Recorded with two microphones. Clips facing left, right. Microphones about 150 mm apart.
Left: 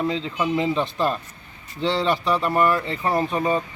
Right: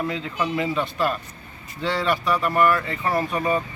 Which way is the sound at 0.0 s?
20° left (ahead or behind).